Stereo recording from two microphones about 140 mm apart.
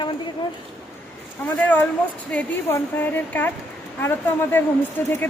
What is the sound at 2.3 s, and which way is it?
A woman's voice, 15° left (ahead or behind).